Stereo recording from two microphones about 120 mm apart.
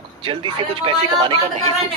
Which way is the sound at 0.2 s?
45° right (ahead or behind).